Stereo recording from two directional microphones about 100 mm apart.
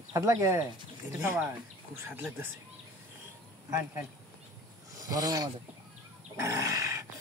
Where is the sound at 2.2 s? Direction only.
20° right (ahead or behind).